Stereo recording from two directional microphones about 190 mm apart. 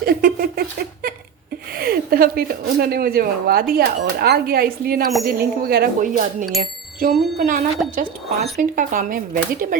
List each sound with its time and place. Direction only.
0.0 s a sound: 50° right (ahead or behind)
1.7 s speech: 50° right (ahead or behind)
6.4 s speech: centre (ahead or behind)
7.0 s speech: 45° right (ahead or behind)
7.8 s speech: 5° right (ahead or behind)
8.5 s speech: 45° right (ahead or behind)